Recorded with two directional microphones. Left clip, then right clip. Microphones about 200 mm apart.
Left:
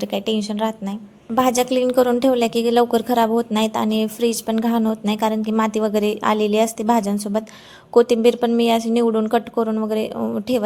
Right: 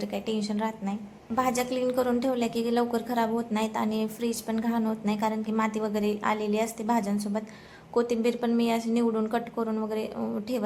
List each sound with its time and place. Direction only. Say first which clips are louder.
0.0 s a woman's voice: left 9 dB; 35° left (ahead or behind)